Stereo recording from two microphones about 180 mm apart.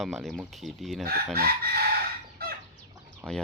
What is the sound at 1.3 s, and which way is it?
Chicken, 55° right (ahead or behind).